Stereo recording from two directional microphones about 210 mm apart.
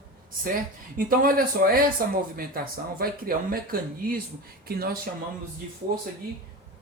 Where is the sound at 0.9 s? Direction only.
45° right (ahead or behind).